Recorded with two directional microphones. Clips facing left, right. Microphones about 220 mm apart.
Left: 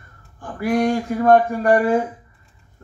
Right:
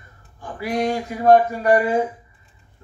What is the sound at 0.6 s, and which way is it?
Speech, 50° left (ahead or behind).